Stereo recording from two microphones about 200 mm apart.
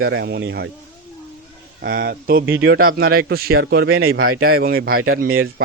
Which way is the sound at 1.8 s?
50° right (ahead or behind).